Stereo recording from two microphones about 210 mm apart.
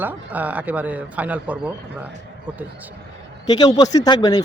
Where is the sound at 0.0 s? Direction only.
10° right (ahead or behind).